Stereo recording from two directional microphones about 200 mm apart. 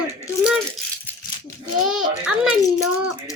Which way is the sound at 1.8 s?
5° right (ahead or behind).